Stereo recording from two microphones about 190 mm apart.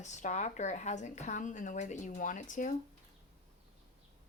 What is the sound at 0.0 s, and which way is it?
Speech, 40° left (ahead or behind).